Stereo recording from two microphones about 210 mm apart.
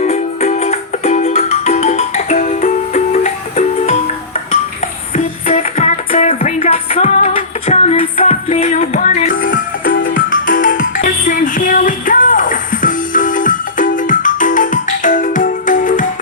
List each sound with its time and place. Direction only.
0.0 s music: 35° left (ahead or behind)
2.6 s music: 40° left (ahead or behind)
5.1 s music: 30° left (ahead or behind)